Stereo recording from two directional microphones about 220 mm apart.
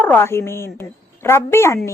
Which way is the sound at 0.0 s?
10° left (ahead or behind).